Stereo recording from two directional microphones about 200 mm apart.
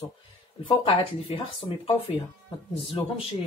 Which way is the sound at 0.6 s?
25° left (ahead or behind).